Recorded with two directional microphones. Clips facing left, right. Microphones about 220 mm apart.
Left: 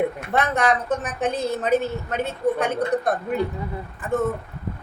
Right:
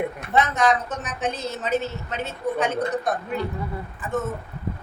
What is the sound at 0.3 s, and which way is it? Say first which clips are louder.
A woman's voice: right 1 dB; 60° left (ahead or behind).